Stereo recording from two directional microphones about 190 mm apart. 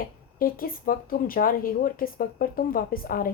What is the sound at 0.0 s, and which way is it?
Speech, 50° left (ahead or behind).